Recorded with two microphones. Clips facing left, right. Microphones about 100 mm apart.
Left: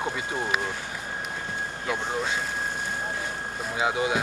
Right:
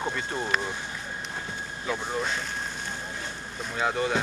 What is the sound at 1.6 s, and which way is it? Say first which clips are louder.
Vehicle: left 4 dB; 65° left (ahead or behind).